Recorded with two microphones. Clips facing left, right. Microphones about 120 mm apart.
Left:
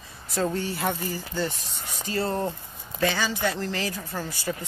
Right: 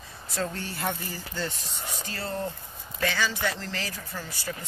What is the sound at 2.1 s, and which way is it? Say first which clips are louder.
Speech: left 7 dB; 25° left (ahead or behind).